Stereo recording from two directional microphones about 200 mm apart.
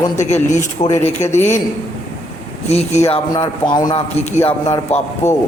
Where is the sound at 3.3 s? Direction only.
20° left (ahead or behind).